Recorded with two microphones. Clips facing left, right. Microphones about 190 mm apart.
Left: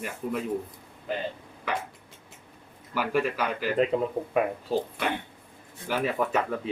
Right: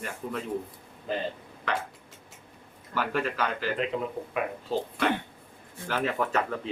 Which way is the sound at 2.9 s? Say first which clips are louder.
Left 2 dB; 10° left (ahead or behind).